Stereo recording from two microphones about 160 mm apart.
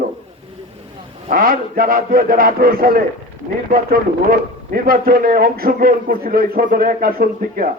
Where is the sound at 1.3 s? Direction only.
60° right (ahead or behind).